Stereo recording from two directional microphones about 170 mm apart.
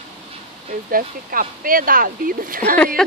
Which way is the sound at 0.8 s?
55° right (ahead or behind).